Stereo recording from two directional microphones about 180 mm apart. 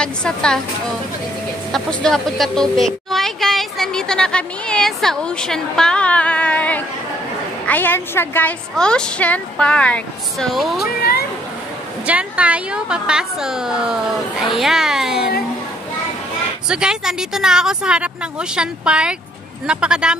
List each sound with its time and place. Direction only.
0.0 s a woman's voice: 5° left (ahead or behind)
1.7 s a woman's voice: 5° left (ahead or behind)
11.0 s speech: 60° left (ahead or behind)
12.1 s a woman's voice: 5° right (ahead or behind)
16.6 s a woman's voice: 5° right (ahead or behind)